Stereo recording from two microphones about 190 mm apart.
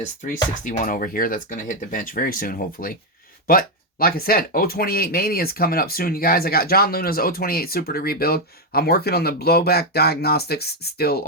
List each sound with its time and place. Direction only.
0.6 s speech: 45° left (ahead or behind)